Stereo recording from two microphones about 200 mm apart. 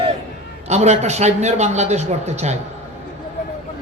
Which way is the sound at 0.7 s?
35° right (ahead or behind).